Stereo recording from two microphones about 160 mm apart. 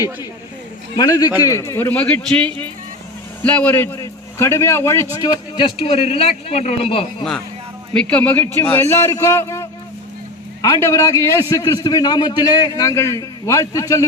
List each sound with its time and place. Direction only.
0.9 s a man's voice: 25° left (ahead or behind)
7.9 s a man's voice: 10° left (ahead or behind)